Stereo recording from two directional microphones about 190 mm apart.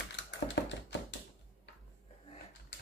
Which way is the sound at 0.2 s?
65° left (ahead or behind).